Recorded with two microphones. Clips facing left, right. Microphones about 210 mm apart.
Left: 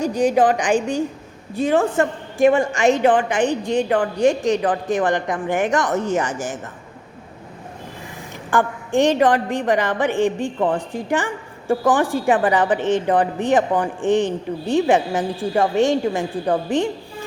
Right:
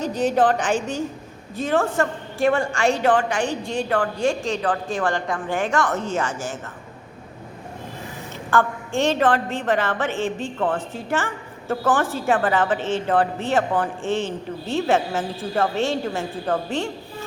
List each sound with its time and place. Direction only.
0.0 s a woman's voice: 10° left (ahead or behind)
8.4 s a woman's voice: 15° left (ahead or behind)